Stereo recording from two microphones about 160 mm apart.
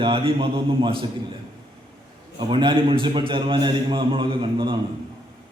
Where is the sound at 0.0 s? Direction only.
35° right (ahead or behind).